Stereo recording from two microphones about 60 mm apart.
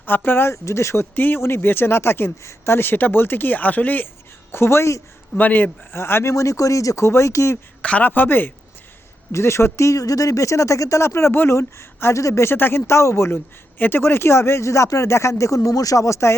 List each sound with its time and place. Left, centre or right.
0.3 s speech: left
0.5 s speech: left
1.1 s speech: left
2.4 s speech: left
2.7 s speech: left
4.5 s speech: left
5.4 s a man's voice: left
5.9 s speech: left
6.3 s speech: left
7.8 s speech: left
8.0 s speech: left
9.3 s speech: left
12.1 s speech: left
12.5 s speech: left